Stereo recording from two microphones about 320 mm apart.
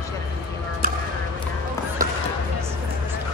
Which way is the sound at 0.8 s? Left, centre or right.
Right.